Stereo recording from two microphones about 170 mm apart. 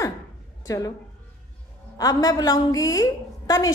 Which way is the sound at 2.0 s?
20° left (ahead or behind).